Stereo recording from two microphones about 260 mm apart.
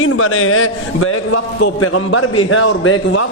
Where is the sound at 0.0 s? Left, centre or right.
Left.